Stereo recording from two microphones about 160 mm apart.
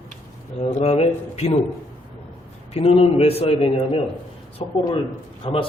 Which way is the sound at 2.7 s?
40° left (ahead or behind).